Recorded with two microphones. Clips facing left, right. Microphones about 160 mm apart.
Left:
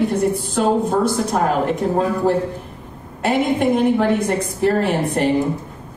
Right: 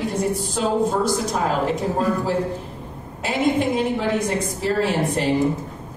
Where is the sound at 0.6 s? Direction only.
60° left (ahead or behind).